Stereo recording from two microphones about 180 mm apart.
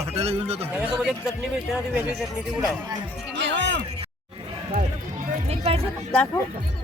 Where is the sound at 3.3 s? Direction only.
80° right.